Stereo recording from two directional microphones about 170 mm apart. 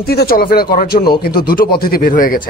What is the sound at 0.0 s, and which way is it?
Speech, 65° left (ahead or behind).